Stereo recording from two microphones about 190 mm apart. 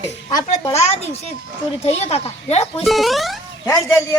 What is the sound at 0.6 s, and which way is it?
Speech, 15° left (ahead or behind).